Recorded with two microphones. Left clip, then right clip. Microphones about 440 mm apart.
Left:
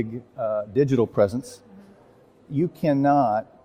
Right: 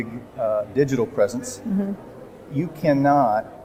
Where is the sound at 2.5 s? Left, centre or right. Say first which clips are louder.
Right 2 dB; left.